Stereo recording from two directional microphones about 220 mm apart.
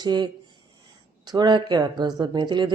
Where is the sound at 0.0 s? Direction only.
20° right (ahead or behind).